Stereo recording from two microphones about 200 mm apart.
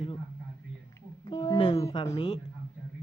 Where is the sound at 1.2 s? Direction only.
20° left (ahead or behind).